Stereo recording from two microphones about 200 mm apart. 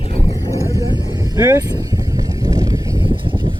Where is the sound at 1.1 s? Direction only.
15° right (ahead or behind).